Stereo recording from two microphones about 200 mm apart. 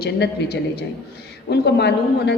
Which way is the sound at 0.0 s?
55° left (ahead or behind).